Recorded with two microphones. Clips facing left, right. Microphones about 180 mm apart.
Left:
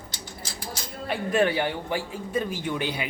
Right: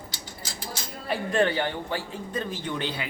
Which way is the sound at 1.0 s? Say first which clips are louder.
Left 1 dB; 10° left (ahead or behind).